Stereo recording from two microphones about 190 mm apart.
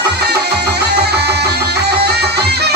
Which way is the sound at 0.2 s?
60° right (ahead or behind).